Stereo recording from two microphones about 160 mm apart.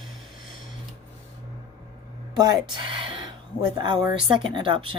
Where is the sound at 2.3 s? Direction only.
25° right (ahead or behind).